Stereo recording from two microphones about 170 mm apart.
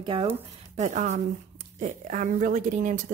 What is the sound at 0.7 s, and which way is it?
Speech, 45° right (ahead or behind).